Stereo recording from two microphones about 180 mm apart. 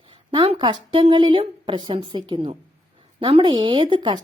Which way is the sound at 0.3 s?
25° right (ahead or behind).